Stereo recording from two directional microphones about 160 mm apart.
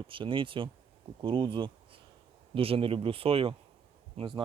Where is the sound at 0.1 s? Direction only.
30° right (ahead or behind).